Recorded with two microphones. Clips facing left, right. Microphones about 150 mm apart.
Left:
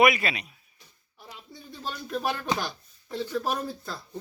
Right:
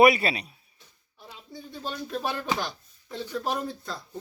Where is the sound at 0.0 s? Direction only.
35° right (ahead or behind).